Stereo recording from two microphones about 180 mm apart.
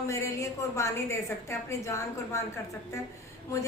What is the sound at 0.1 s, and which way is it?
A woman's voice, 15° left (ahead or behind).